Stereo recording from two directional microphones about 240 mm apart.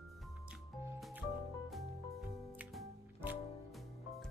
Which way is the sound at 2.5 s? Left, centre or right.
Centre.